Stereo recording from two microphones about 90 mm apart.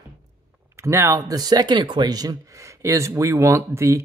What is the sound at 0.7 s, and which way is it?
Speech, 30° right (ahead or behind).